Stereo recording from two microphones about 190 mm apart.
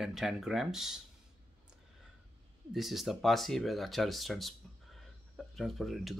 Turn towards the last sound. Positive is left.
turn(degrees=0)  # may be behind; listen again after turning